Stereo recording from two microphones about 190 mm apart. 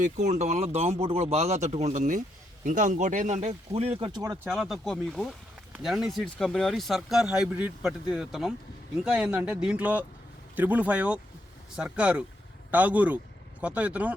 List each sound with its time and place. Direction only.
0.0 s speech: 40° right (ahead or behind); by 4.4 s 20° right (ahead or behind)
4.4 s speech: centre (ahead or behind)